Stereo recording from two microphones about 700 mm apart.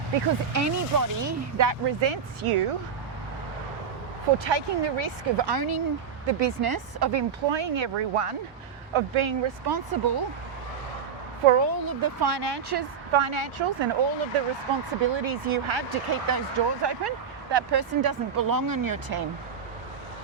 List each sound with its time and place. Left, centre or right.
0.5 s speech: right
2.0 s speech: right
4.4 s speech: right
11.4 s speech: right